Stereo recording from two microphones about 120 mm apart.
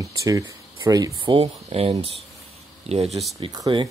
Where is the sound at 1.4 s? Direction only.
55° right (ahead or behind).